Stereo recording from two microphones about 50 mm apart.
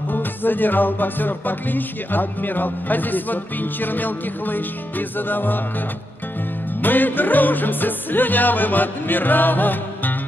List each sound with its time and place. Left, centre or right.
0.1 s music: left
6.8 s music: left